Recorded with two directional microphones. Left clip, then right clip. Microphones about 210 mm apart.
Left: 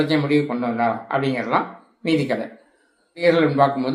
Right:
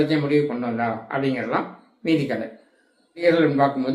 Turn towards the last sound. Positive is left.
turn(degrees=20)  # may be behind; listen again after turning